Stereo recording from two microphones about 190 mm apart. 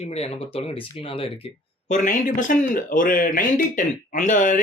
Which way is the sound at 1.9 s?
40° left (ahead or behind).